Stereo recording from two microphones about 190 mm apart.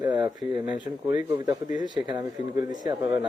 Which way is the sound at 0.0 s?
20° right (ahead or behind).